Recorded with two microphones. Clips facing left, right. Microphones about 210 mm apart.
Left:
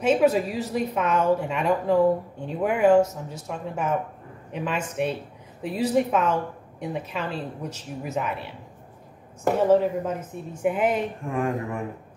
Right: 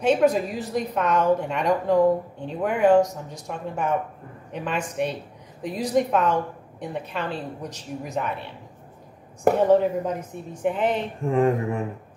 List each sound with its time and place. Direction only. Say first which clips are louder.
0.0 s a woman's voice: even; 5° left (ahead or behind)
9.6 s a woman's voice: left 1 dB; centre (ahead or behind)
11.2 s speech: right 11 dB; 25° right (ahead or behind)